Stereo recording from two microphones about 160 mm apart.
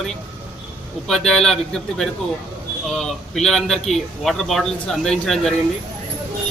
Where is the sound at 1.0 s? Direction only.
5° left (ahead or behind).